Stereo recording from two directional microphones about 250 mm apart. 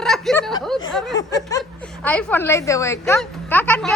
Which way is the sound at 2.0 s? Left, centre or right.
Centre.